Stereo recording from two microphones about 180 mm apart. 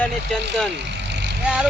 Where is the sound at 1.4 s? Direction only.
5° right (ahead or behind).